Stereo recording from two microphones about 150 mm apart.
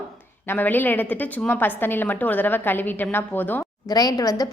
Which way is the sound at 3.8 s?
25° left (ahead or behind).